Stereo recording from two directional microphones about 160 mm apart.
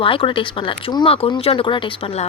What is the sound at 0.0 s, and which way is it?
Speech, 35° left (ahead or behind).